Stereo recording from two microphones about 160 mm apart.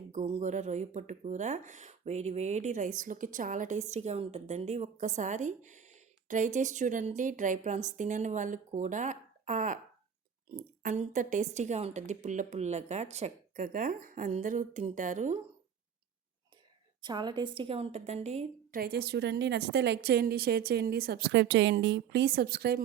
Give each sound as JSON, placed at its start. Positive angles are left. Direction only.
{"t": 0.1, "sound": "speech", "side_deg": -50}
{"t": 17.0, "sound": "a woman's voice", "side_deg": -25}
{"t": 18.7, "sound": "a woman's voice", "side_deg": -75}